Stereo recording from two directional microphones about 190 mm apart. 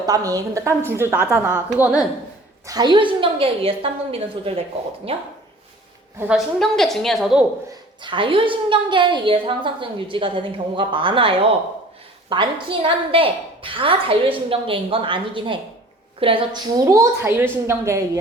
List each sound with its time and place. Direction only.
0.0 s a woman's voice: 20° right (ahead or behind)
2.6 s a woman's voice: 20° right (ahead or behind)
6.1 s a woman's voice: 5° right (ahead or behind)
8.0 s a woman's voice: 25° right (ahead or behind)